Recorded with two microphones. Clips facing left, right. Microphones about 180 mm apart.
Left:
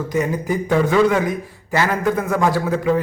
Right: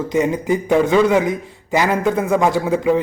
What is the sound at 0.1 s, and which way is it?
A man's voice, 20° right (ahead or behind).